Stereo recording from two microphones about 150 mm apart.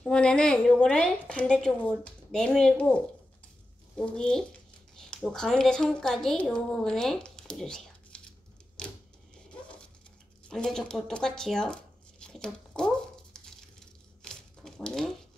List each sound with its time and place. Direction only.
0.0 s a woman's voice: 5° left (ahead or behind)
10.5 s tearing: 5° left (ahead or behind)
14.2 s a sound: 5° left (ahead or behind)